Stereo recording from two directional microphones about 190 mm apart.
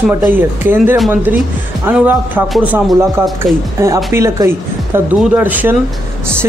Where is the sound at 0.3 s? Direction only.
10° right (ahead or behind).